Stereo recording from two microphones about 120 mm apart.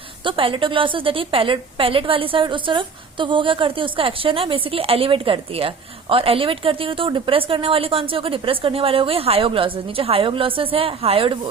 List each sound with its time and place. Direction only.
0.3 s a woman's voice: 45° right (ahead or behind)